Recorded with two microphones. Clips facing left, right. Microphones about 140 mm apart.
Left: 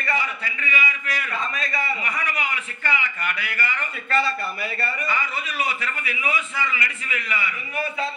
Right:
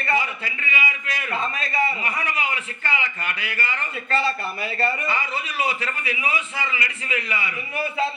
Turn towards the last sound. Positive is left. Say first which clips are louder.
# right 1 dB
turn(degrees=-25)  # may be behind; listen again after turning